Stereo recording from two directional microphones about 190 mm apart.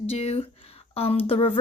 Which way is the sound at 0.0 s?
35° left (ahead or behind).